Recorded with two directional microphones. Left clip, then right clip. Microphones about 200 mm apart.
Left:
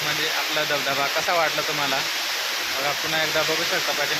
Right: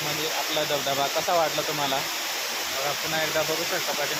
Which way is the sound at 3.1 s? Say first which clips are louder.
Left 3 dB; 25° left (ahead or behind).